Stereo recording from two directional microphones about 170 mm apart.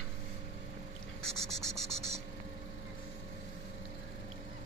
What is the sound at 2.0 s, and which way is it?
Vehicle, 40° right (ahead or behind).